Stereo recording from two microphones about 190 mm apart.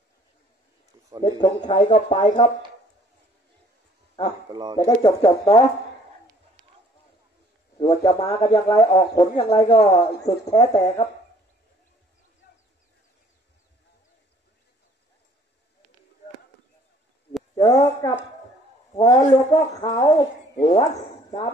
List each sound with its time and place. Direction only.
1.2 s speech: 25° left (ahead or behind)
4.5 s speech: 20° right (ahead or behind)
4.7 s speech: 20° left (ahead or behind)
7.7 s speech: 20° left (ahead or behind)
17.7 s speech: 35° left (ahead or behind)
19.2 s speech: 35° left (ahead or behind)